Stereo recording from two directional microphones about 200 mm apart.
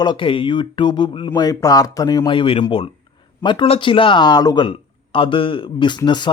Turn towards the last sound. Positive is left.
turn(degrees=20)  # may be behind; listen again after turning